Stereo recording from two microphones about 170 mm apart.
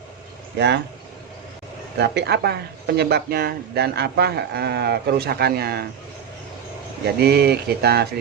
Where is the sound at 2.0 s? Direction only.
80° right.